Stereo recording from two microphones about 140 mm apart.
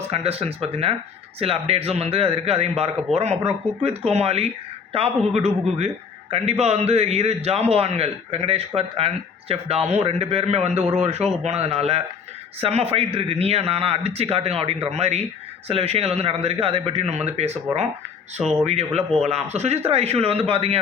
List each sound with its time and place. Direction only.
0.1 s a man's voice: 45° right (ahead or behind)